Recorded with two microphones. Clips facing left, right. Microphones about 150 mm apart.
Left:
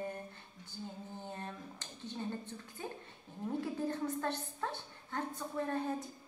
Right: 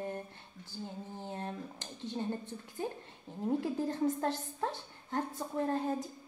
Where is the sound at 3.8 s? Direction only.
25° right (ahead or behind).